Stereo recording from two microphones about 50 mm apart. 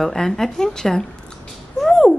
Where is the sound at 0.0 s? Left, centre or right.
Centre.